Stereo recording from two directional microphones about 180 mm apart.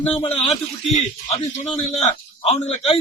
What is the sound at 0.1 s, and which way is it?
A man's voice, 35° left (ahead or behind).